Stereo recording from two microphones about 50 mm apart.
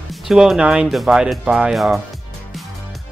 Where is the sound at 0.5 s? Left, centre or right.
Centre.